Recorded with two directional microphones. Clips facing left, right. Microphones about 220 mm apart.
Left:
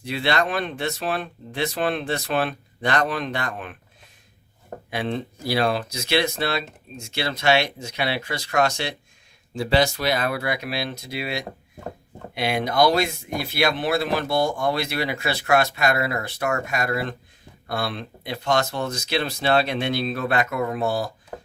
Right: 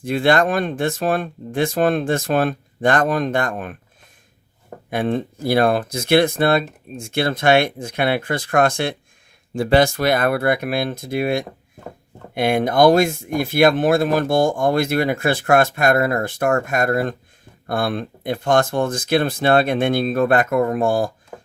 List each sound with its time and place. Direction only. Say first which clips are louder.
0.0 s speech: right 7 dB; 50° right (ahead or behind)
4.9 s speech: right 6 dB; 50° right (ahead or behind)